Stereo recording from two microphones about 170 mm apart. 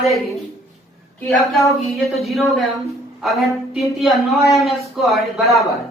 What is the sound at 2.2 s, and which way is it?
A man's voice, centre (ahead or behind).